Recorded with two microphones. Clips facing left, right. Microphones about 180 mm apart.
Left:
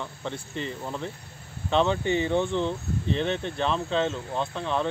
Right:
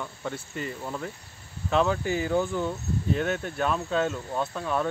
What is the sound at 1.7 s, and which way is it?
Speech, 5° right (ahead or behind).